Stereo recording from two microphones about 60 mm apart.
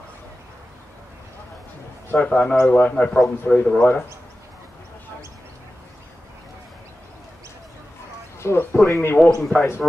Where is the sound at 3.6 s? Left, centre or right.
Centre.